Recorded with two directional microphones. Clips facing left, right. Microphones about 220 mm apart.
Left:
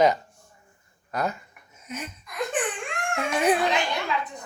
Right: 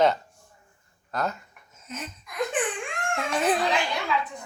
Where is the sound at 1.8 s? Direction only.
10° left (ahead or behind).